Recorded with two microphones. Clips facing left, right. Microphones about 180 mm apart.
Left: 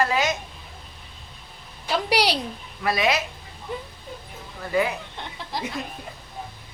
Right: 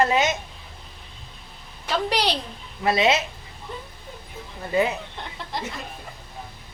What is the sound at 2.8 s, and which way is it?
Speech, 25° right (ahead or behind).